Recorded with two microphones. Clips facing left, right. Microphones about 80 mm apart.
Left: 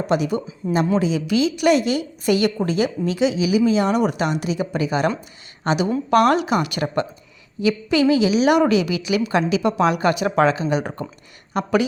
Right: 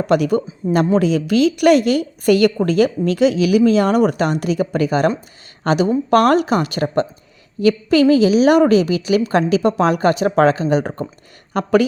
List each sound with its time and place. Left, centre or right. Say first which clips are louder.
0.1 s a woman's voice: right 6 dB; right
7.6 s a woman's voice: right 5 dB; right